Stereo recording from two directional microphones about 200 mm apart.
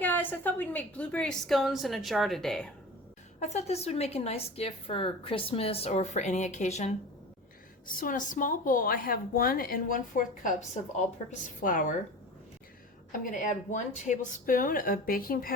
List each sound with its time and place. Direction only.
0.0 s a woman's voice: 10° left (ahead or behind)
3.4 s a woman's voice: 35° left (ahead or behind)
13.1 s a woman's voice: 40° left (ahead or behind)